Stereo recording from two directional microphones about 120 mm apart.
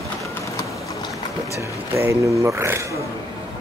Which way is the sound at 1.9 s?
25° right (ahead or behind).